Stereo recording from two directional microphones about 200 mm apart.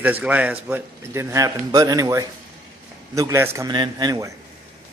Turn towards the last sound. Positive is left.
turn(degrees=-15)  # may be behind; listen again after turning